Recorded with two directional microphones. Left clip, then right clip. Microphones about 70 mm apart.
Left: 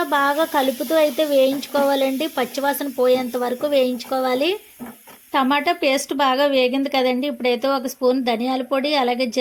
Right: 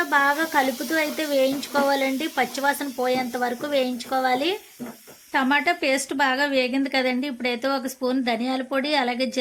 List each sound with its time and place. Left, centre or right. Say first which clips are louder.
0.1 s speech: left 2 dB; left
5.3 s a woman's voice: left 2 dB; left